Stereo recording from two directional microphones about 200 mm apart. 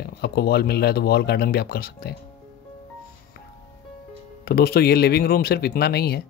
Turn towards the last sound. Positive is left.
turn(degrees=55)  # may be behind; listen again after turning